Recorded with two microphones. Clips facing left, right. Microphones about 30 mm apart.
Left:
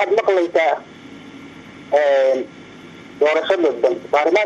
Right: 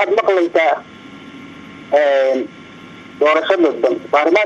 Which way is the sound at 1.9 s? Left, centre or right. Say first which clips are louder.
Right 2 dB; centre.